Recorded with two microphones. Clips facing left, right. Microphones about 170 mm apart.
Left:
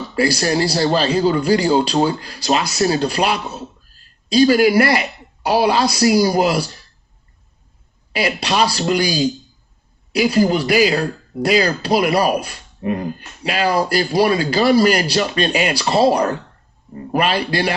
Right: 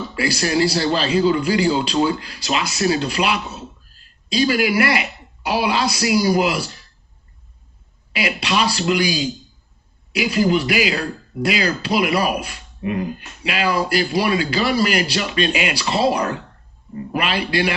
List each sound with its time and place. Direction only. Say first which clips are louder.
0.1 s speech: left 4 dB; 40° left (ahead or behind)
8.1 s speech: left 2 dB; 40° left (ahead or behind)